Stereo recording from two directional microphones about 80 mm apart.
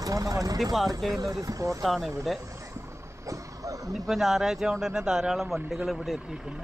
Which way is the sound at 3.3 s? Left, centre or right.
Right.